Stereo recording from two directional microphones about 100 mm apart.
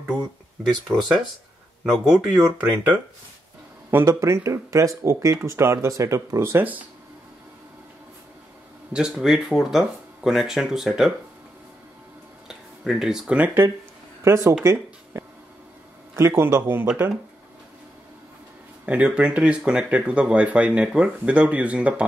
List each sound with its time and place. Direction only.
0.8 s speech: centre (ahead or behind)
3.9 s speech: 25° right (ahead or behind)
6.6 s speech: 15° right (ahead or behind)
8.9 s speech: 5° right (ahead or behind)
12.4 s a sound: 5° right (ahead or behind)
14.2 s speech: 30° right (ahead or behind)
14.6 s a sound: 30° right (ahead or behind)
16.2 s speech: 25° right (ahead or behind)
18.9 s speech: 15° right (ahead or behind)